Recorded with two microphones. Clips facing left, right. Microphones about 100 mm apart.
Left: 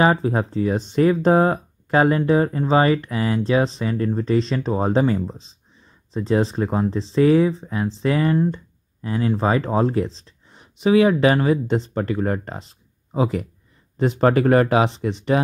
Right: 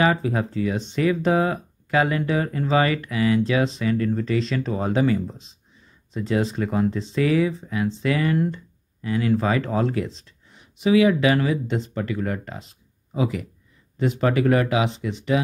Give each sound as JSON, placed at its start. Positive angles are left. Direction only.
{"t": 0.0, "sound": "speech", "side_deg": 35}